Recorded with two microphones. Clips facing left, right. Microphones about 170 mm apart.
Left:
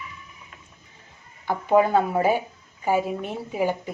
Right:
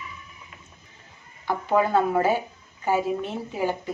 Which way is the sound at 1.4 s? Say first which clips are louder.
Left 3 dB; 15° left (ahead or behind).